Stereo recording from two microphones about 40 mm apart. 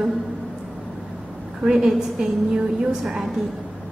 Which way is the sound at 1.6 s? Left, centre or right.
Centre.